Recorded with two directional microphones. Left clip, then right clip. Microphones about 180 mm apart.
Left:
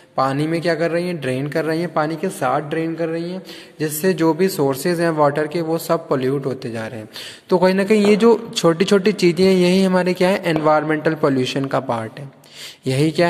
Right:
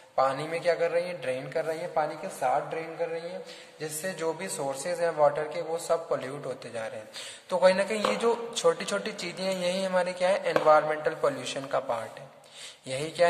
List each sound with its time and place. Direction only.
0.1 s a man's voice: 40° left (ahead or behind)